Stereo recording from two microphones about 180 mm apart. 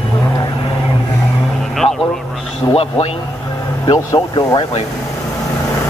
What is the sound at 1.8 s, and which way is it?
Vehicle, centre (ahead or behind).